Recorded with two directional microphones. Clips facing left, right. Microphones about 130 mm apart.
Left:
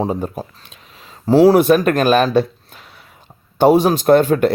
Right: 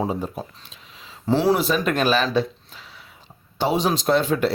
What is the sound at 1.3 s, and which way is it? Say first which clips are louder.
Speech: left 9 dB; 40° left (ahead or behind).